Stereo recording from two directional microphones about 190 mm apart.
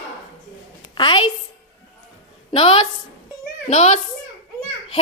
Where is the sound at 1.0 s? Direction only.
25° left (ahead or behind).